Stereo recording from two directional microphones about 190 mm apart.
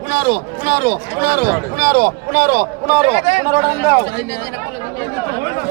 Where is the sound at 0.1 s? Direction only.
45° right (ahead or behind).